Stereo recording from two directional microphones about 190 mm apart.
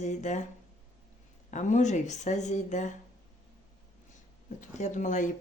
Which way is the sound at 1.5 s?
40° left (ahead or behind).